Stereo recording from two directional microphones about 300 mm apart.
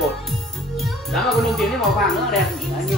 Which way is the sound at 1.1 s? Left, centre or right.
Centre.